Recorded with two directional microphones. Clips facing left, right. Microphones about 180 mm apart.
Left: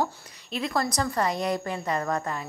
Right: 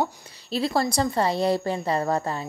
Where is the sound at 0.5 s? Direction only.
30° right (ahead or behind).